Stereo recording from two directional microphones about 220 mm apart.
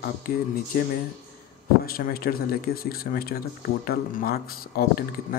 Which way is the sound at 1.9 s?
40° left (ahead or behind).